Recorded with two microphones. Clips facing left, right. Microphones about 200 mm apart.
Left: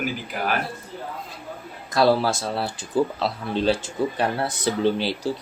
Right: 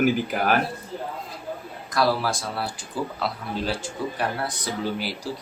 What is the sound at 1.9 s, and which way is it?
Speech, 25° left (ahead or behind).